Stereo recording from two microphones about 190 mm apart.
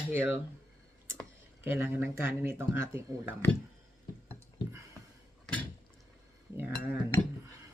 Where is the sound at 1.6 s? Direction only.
10° right (ahead or behind).